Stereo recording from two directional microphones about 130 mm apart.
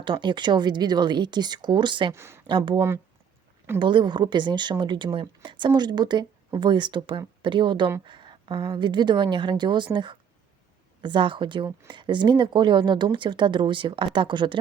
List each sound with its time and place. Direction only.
0.0 s speech: 40° right (ahead or behind)
2.1 s speech: 20° right (ahead or behind)
2.5 s speech: 35° right (ahead or behind)